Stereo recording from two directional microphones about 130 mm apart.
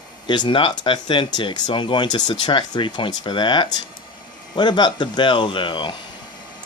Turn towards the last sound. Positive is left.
turn(degrees=40)  # may be behind; listen again after turning